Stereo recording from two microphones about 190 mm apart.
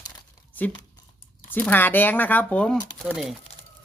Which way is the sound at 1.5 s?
10° left (ahead or behind).